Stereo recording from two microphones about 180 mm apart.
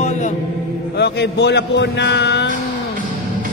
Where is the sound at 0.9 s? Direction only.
70° left (ahead or behind).